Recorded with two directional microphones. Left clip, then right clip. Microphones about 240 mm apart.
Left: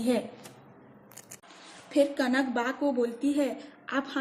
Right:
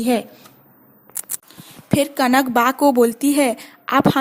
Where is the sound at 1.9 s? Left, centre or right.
Right.